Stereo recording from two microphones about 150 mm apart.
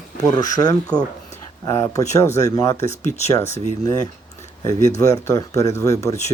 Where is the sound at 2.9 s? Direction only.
50° left (ahead or behind).